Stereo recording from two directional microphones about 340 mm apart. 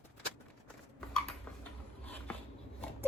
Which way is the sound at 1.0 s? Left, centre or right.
Centre.